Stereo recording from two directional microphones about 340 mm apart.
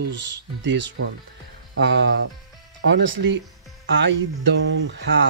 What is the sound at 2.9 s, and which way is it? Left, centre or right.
Speech, right.